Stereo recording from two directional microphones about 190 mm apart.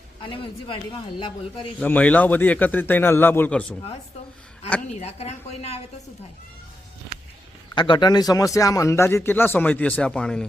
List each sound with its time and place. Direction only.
0.2 s speech: 25° left (ahead or behind)
1.8 s speech: 5° left (ahead or behind)
4.9 s a woman's voice: 35° left (ahead or behind)
7.8 s speech: 25° left (ahead or behind); by 10.4 s 5° left (ahead or behind)